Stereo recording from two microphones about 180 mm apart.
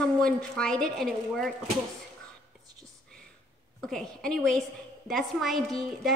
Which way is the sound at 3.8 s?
5° left (ahead or behind).